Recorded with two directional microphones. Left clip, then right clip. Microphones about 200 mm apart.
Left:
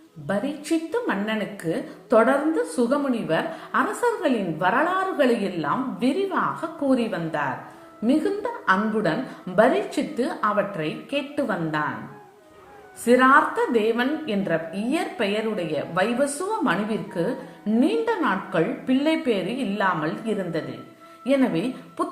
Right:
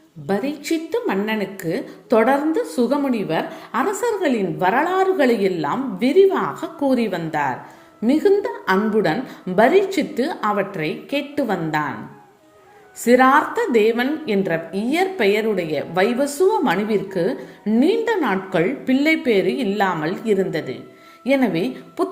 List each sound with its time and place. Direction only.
0.3 s a woman's voice: 30° right (ahead or behind)
13.1 s a woman's voice: 30° right (ahead or behind)